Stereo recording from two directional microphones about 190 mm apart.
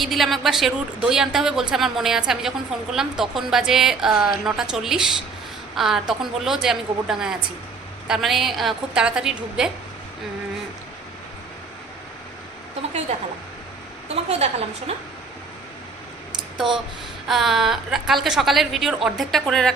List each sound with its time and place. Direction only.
0.0 s a woman's voice: centre (ahead or behind)
13.1 s a woman's voice: 35° right (ahead or behind)
14.3 s a woman's voice: 35° right (ahead or behind)
16.6 s a woman's voice: centre (ahead or behind)